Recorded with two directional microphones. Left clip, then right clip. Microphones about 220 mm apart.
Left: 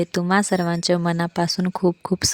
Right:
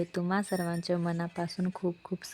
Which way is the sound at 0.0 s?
25° left (ahead or behind).